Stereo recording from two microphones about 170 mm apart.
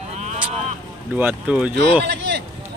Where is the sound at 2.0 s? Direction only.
85° right.